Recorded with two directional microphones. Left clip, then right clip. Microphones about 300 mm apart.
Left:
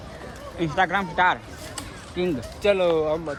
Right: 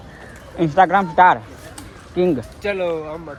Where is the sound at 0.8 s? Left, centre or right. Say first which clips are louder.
Right 9 dB; centre.